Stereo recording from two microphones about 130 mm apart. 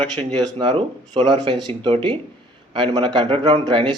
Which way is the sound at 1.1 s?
35° right (ahead or behind).